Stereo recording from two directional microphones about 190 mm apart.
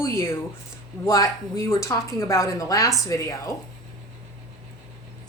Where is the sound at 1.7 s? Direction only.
15° left (ahead or behind).